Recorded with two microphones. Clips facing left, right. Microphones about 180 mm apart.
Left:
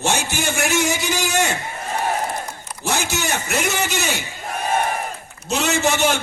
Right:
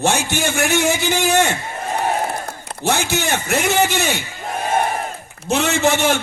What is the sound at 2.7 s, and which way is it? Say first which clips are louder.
A man's voice: right 4 dB; 60° right (ahead or behind).